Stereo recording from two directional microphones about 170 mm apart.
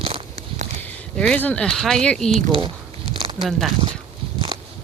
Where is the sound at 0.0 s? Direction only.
35° right (ahead or behind).